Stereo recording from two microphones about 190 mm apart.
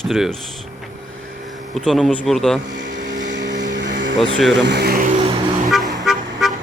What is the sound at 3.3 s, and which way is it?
Vehicle, 70° right (ahead or behind).